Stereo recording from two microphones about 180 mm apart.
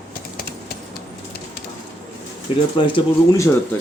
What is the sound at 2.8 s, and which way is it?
Speech, 25° left (ahead or behind).